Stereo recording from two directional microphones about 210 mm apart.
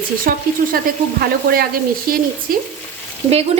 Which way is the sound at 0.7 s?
45° right (ahead or behind).